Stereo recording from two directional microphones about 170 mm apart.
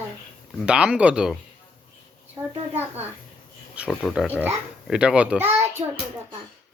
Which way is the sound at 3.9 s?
Centre (ahead or behind).